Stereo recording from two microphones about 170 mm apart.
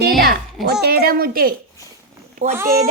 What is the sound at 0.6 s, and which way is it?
A child's voice, 65° right (ahead or behind).